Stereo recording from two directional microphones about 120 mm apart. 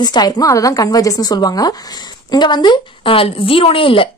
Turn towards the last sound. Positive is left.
turn(degrees=50)  # may be behind; listen again after turning